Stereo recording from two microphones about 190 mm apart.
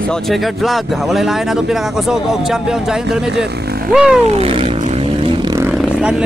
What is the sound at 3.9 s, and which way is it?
Speech, 5° right (ahead or behind).